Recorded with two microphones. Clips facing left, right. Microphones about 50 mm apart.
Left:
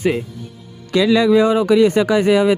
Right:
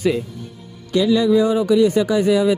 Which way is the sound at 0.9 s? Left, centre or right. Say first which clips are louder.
Left 2 dB; left.